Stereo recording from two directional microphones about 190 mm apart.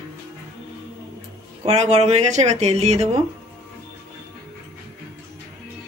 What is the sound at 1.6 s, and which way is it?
Speech, 35° right (ahead or behind).